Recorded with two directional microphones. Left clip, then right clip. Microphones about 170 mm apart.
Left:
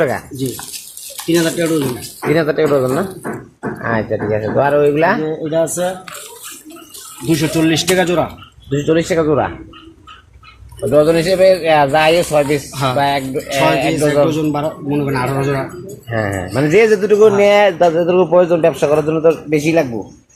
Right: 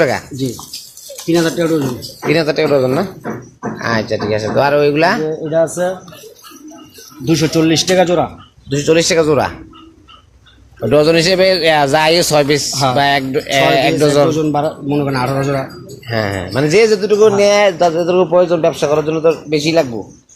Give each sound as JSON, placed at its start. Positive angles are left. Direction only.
{"t": 1.3, "sound": "speech", "side_deg": -45}
{"t": 2.3, "sound": "speech", "side_deg": -15}
{"t": 7.3, "sound": "speech", "side_deg": -45}
{"t": 8.7, "sound": "speech", "side_deg": -15}
{"t": 10.9, "sound": "a man's voice", "side_deg": -35}
{"t": 16.0, "sound": "a man's voice", "side_deg": -10}
{"t": 17.0, "sound": "speech", "side_deg": 20}
{"t": 17.3, "sound": "a man's voice", "side_deg": 0}